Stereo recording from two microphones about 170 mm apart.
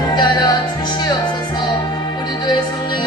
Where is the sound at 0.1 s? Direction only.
25° left (ahead or behind).